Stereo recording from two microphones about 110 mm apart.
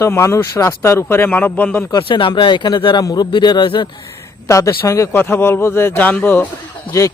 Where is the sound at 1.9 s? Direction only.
45° left (ahead or behind).